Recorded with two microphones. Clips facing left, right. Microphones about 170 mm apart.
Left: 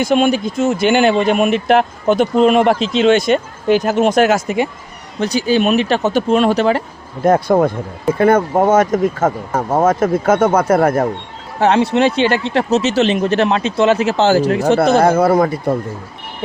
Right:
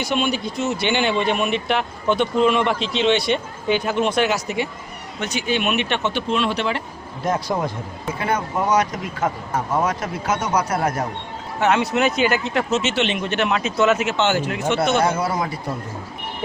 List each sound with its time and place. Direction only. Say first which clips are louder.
0.0 s speech: left 8 dB; 50° left (ahead or behind)
5.2 s speech: left 8 dB; 35° left (ahead or behind)
7.3 s speech: left 10 dB; 55° left (ahead or behind)
11.6 s speech: left 6 dB; 30° left (ahead or behind)
15.2 s speech: left 11 dB; 55° left (ahead or behind)